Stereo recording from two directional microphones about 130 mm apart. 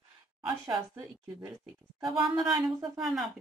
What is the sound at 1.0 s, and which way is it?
A woman's voice, 25° right (ahead or behind).